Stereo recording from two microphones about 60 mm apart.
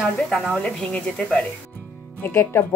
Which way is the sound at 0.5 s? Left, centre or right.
Centre.